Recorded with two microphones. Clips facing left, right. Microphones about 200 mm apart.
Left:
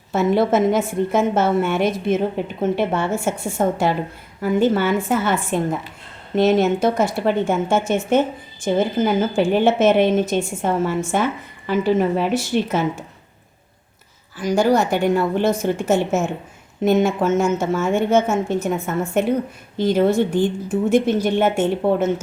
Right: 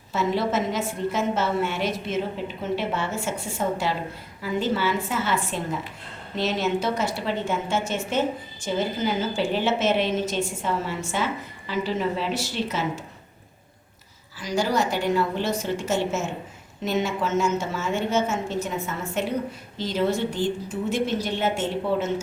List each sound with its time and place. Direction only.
0.1 s a woman's voice: 55° left (ahead or behind)
14.3 s a woman's voice: 50° left (ahead or behind)